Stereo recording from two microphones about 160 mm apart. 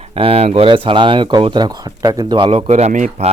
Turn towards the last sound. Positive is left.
turn(degrees=-45)  # may be behind; listen again after turning